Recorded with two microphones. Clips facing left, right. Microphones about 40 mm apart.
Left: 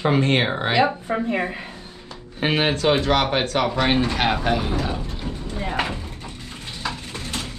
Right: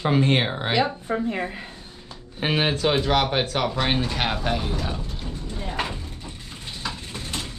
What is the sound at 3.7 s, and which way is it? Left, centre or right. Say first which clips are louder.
Speech: left 4 dB; centre.